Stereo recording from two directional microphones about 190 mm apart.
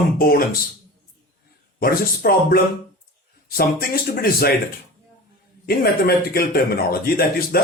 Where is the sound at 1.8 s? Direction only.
50° left (ahead or behind).